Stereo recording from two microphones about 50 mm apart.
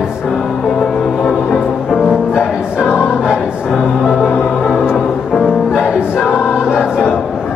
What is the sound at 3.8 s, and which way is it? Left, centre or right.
Music, left.